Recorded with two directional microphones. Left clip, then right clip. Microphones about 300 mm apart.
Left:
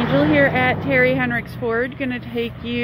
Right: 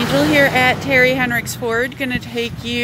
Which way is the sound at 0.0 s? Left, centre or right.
Right.